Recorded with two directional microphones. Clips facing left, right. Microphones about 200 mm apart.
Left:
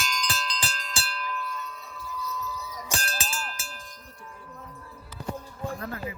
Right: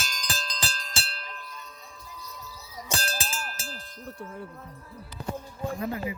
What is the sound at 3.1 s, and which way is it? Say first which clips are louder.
Clang: even; 30° right (ahead or behind).